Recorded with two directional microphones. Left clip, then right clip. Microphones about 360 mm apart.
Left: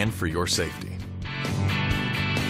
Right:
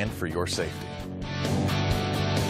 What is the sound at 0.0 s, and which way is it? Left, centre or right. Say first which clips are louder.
Speech: left 3 dB; right.